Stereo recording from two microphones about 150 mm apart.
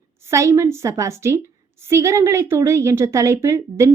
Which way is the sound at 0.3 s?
20° right (ahead or behind).